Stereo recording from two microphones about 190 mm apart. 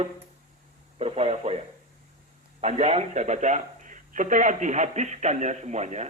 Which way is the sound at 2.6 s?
35° right (ahead or behind).